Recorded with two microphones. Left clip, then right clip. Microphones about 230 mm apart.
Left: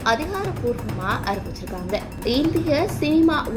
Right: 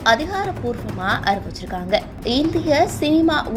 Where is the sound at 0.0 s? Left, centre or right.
Right.